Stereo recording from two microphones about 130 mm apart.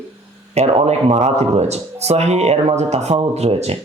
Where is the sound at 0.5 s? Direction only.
50° right (ahead or behind).